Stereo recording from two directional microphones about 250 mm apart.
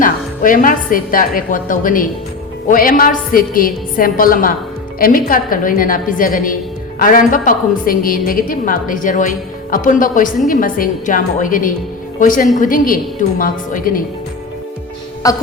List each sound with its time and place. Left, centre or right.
0.0 s a woman's voice: left
15.2 s music: centre